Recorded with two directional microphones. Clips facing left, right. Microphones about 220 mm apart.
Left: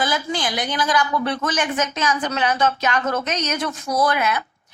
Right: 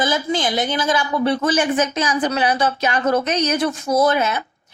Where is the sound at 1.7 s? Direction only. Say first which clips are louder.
Right 3 dB; 10° right (ahead or behind).